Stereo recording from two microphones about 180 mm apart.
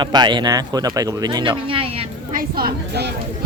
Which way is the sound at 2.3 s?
55° right (ahead or behind).